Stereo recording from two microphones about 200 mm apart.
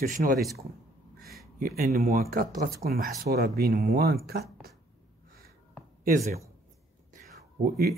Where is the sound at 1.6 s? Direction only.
40° right (ahead or behind); by 4.2 s 55° right (ahead or behind).